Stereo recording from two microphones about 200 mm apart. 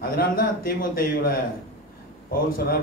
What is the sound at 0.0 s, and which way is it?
A man's voice, 50° left (ahead or behind).